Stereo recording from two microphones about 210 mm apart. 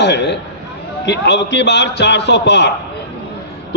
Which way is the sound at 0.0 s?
55° left (ahead or behind).